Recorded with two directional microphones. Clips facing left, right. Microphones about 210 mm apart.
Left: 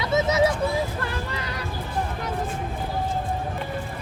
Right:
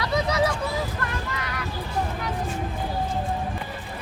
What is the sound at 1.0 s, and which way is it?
Music, 30° left (ahead or behind).